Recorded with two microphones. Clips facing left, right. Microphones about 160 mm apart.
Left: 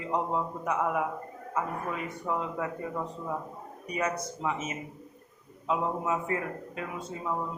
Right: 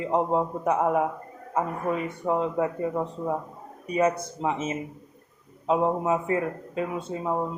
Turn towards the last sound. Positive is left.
turn(degrees=-35)  # may be behind; listen again after turning